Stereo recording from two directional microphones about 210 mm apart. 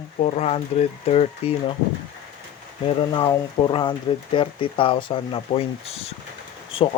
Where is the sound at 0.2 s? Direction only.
30° left (ahead or behind).